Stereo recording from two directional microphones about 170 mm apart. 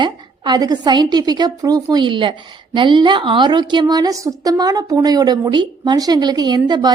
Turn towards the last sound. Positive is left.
turn(degrees=-25)  # may be behind; listen again after turning